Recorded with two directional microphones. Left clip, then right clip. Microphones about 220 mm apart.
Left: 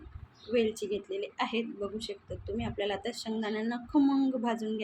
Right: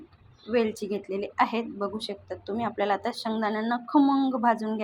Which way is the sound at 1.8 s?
20° right (ahead or behind).